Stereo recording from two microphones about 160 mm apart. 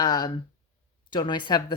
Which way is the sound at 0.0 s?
25° left (ahead or behind).